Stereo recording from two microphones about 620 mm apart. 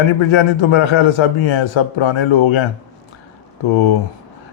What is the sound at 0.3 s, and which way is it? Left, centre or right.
A man's voice, left.